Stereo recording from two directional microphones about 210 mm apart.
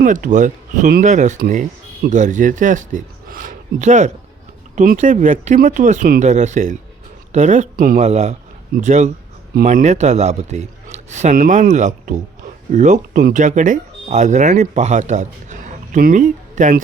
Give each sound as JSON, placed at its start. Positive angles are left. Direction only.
{"t": 0.0, "sound": "a man's voice", "side_deg": -40}